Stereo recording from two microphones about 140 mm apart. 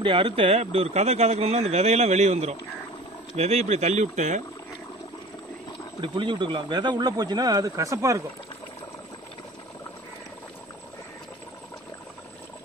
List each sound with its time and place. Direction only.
0.0 s speech: 40° right (ahead or behind); by 4.4 s 55° right (ahead or behind)
5.9 s speech: 35° right (ahead or behind)